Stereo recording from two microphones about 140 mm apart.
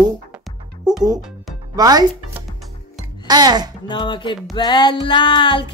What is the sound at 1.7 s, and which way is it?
Speech, 25° right (ahead or behind).